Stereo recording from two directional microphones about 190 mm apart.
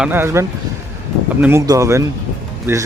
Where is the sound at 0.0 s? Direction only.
10° right (ahead or behind).